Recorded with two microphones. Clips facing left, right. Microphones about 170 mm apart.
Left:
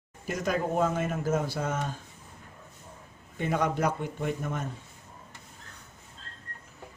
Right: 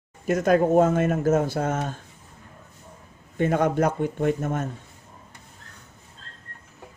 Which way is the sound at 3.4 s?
50° right (ahead or behind).